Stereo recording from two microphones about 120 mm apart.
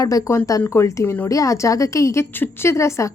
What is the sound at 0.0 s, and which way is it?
A woman's voice, 30° left (ahead or behind).